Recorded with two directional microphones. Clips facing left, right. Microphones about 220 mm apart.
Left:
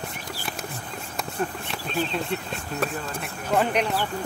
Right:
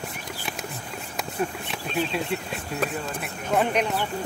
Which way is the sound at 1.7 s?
5° right (ahead or behind).